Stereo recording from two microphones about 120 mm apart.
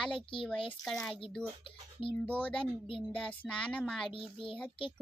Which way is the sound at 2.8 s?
50° left (ahead or behind).